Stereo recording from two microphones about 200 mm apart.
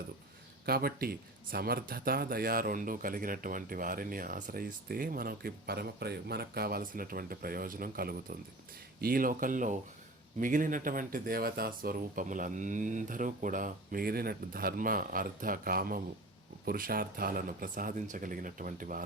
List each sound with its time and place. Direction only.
0.6 s speech: 50° right (ahead or behind)